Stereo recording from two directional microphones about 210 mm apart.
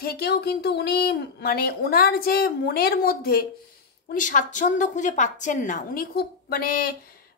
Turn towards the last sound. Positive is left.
turn(degrees=45)  # may be behind; listen again after turning